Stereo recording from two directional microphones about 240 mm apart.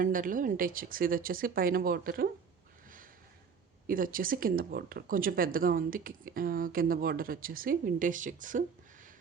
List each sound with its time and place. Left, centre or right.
0.0 s speech: right
3.8 s speech: right